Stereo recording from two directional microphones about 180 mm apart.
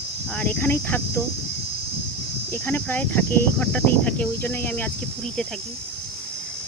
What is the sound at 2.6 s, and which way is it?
Speech, 10° left (ahead or behind).